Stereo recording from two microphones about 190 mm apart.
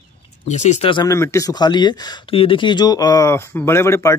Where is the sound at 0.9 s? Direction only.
15° left (ahead or behind).